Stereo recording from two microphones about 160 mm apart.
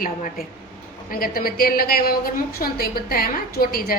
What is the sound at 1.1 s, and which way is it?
A woman's voice, 65° left (ahead or behind).